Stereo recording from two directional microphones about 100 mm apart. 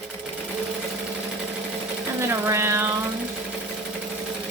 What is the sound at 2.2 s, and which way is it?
Speech, 25° right (ahead or behind).